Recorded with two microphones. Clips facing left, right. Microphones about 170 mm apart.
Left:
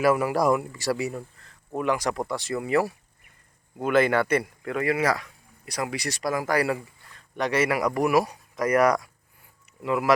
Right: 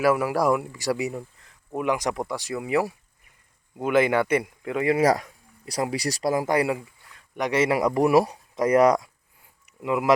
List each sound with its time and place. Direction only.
0.0 s a man's voice: 5° right (ahead or behind)
4.9 s a man's voice: 40° right (ahead or behind); by 10.1 s 15° right (ahead or behind)